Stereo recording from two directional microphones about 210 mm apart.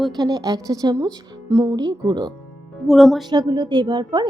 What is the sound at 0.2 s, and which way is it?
Speech, 20° right (ahead or behind).